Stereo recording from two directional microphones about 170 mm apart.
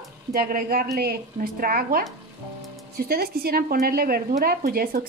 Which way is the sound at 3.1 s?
65° right (ahead or behind).